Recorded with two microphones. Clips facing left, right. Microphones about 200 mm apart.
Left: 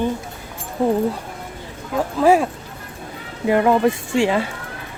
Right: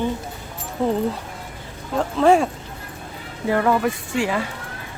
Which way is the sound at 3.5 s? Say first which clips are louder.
Left 4 dB; 20° left (ahead or behind).